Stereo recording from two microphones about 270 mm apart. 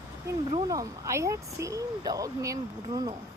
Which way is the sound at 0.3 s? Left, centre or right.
Centre.